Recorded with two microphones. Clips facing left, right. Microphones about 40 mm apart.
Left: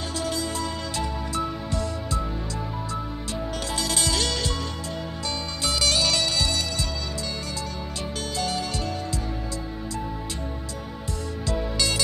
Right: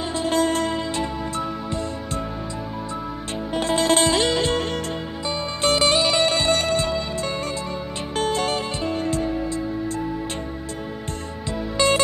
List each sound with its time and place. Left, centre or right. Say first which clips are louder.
0.1 s music: right 6 dB; right
0.4 s music: right 8 dB; right
0.9 s music: right 3 dB; right
3.5 s music: right 11 dB; right
11.8 s music: right 9 dB; right